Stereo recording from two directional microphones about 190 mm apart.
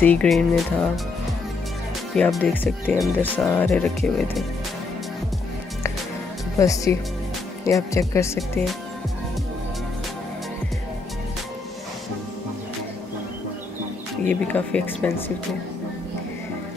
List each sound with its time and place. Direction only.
0.0 s speech: 5° left (ahead or behind)
2.1 s speech: 5° left (ahead or behind)
6.6 s speech: 15° left (ahead or behind)
14.2 s speech: 5° left (ahead or behind)